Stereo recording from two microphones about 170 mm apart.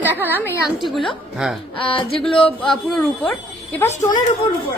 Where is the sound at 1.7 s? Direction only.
30° left (ahead or behind).